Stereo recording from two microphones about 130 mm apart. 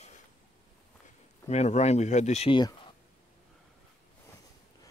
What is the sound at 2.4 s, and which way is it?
Speech, 35° left (ahead or behind).